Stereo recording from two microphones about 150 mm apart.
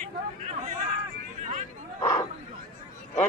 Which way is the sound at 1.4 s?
50° right (ahead or behind).